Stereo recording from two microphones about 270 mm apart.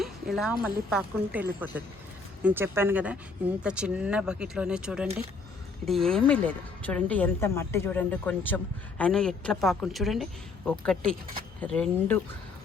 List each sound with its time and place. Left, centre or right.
0.0 s a woman's voice: centre